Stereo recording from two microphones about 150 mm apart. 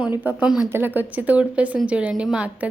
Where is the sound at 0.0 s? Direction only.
10° right (ahead or behind).